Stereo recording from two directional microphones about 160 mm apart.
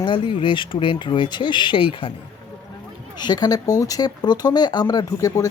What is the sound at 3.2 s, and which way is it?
Speech, 25° left (ahead or behind).